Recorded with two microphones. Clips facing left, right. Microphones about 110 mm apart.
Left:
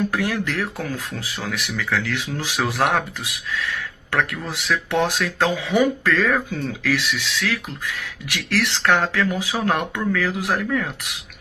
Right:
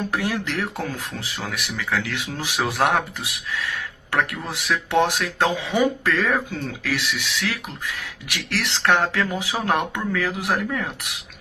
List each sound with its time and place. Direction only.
0.1 s speech: 20° right (ahead or behind)